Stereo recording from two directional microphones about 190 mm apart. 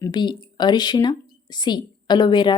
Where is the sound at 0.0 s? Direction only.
25° left (ahead or behind).